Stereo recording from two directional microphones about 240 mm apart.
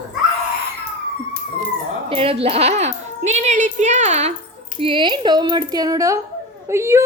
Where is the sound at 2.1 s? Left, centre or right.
Right.